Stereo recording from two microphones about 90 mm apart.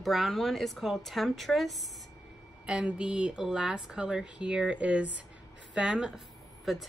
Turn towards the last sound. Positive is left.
turn(degrees=0)  # may be behind; listen again after turning